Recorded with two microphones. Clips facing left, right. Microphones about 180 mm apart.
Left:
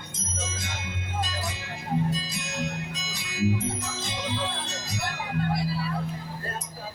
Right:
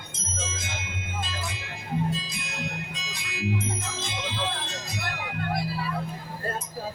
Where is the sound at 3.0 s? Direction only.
40° left (ahead or behind).